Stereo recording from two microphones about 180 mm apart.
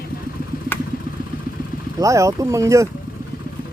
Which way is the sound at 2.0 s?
15° right (ahead or behind).